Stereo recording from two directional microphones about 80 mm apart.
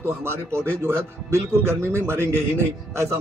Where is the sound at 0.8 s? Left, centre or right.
Right.